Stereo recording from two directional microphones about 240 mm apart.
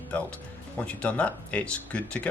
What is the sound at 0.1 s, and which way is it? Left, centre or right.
Speech, centre.